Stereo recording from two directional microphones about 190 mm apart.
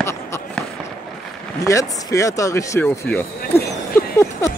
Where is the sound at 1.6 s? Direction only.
15° left (ahead or behind).